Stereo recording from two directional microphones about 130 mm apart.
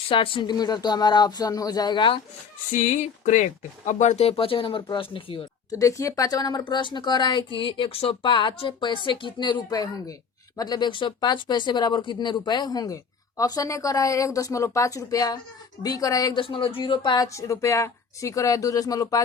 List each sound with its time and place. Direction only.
0.1 s speech: 40° left (ahead or behind)
2.7 s speech: 65° left (ahead or behind); by 5.5 s 40° left (ahead or behind)
5.7 s speech: 25° left (ahead or behind)
16.4 s speech: 45° left (ahead or behind); by 19.2 s 25° left (ahead or behind)